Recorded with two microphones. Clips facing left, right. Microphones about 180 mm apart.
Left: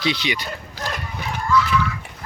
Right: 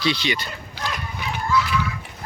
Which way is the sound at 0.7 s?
45° left (ahead or behind).